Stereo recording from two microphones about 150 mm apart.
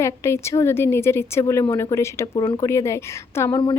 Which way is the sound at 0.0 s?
20° left (ahead or behind).